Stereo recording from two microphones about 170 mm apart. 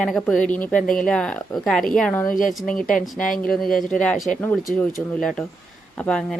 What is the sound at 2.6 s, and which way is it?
Speech, 55° left (ahead or behind).